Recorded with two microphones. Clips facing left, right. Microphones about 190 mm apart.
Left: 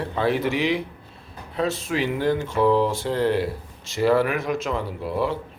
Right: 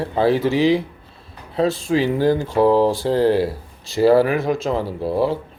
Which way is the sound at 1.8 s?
35° right (ahead or behind).